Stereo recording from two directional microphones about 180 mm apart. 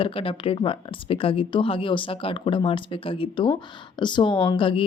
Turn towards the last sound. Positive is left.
turn(degrees=30)  # may be behind; listen again after turning